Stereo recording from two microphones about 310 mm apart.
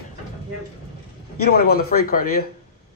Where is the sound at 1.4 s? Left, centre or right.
Left.